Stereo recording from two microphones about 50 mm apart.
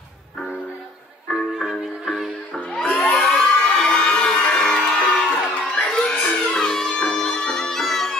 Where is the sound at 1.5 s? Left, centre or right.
Centre.